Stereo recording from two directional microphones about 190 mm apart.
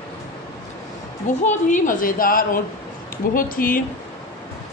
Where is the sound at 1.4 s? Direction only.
45° left (ahead or behind).